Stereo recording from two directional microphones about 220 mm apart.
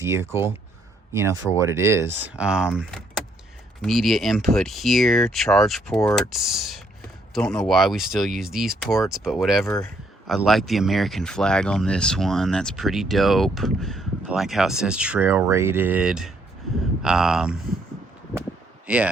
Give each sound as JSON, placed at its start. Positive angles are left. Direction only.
{"t": 0.0, "sound": "speech", "side_deg": -10}